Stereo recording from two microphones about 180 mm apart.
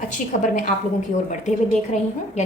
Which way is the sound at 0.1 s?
45° left (ahead or behind).